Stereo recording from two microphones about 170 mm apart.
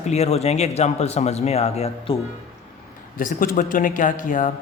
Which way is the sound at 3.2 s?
55° left (ahead or behind).